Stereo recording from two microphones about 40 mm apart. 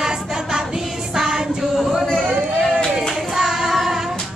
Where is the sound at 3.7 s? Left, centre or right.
Centre.